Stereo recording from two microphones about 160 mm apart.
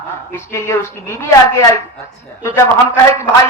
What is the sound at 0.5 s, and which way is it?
Speech, 15° left (ahead or behind).